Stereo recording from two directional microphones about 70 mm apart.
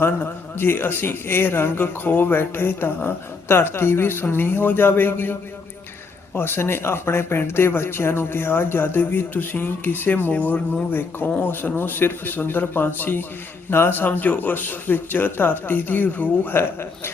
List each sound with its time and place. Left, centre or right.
0.2 s a man's voice: left